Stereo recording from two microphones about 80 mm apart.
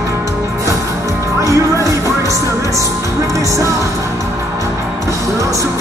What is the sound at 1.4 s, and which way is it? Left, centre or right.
Music, right.